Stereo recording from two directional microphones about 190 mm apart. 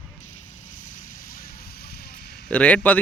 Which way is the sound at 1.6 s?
55° left (ahead or behind).